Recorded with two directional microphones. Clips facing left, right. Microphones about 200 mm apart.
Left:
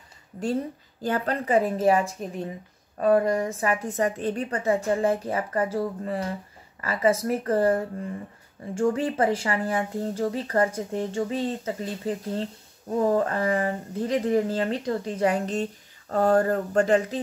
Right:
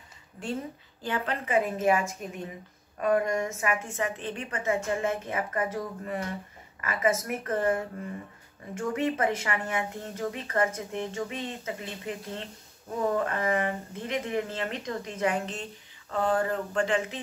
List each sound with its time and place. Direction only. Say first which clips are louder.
1.0 s speech: left 5 dB; 40° left (ahead or behind)